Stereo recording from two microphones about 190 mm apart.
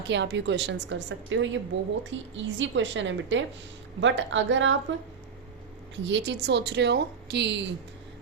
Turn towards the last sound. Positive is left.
turn(degrees=-65)  # may be behind; listen again after turning